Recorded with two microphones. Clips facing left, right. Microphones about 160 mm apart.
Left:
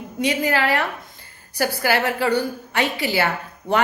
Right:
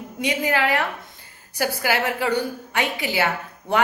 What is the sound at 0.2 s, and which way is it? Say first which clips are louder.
A woman's voice: left 2 dB; 15° right (ahead or behind).